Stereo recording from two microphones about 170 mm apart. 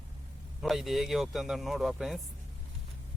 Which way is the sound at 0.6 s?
Centre (ahead or behind).